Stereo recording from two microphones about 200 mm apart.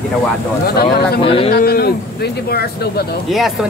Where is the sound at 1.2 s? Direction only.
25° left (ahead or behind).